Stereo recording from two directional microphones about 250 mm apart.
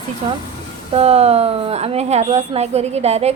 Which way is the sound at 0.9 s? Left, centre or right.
Right.